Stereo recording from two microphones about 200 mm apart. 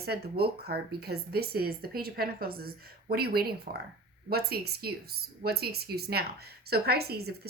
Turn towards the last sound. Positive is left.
turn(degrees=-50)  # may be behind; listen again after turning